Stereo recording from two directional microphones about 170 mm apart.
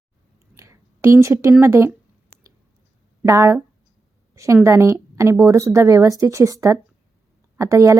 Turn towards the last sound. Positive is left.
turn(degrees=-15)  # may be behind; listen again after turning